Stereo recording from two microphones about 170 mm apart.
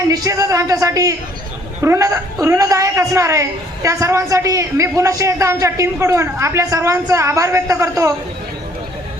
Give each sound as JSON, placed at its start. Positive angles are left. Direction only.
{"t": 0.1, "sound": "a woman's voice", "side_deg": -20}